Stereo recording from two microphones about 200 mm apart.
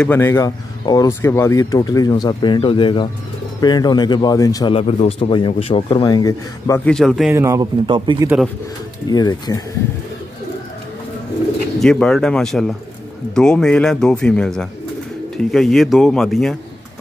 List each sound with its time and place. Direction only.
0.0 s speech: 10° left (ahead or behind)
6.9 s speech: centre (ahead or behind)
7.3 s speech: 15° right (ahead or behind)
9.1 s speech: 20° left (ahead or behind)
11.8 s speech: 5° left (ahead or behind)